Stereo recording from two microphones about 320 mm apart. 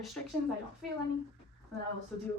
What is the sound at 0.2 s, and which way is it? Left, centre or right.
Speech, centre.